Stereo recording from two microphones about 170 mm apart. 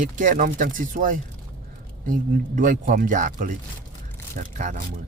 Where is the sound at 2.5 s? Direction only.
55° right (ahead or behind).